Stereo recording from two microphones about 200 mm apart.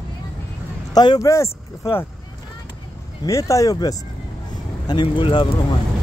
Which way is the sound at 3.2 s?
15° left (ahead or behind).